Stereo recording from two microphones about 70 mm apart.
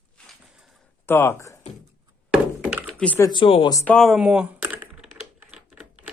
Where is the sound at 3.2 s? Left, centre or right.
Left.